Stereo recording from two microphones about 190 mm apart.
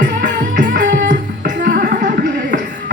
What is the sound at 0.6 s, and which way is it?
Music, 65° right (ahead or behind).